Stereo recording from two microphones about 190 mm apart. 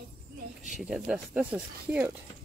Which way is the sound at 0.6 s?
5° right (ahead or behind).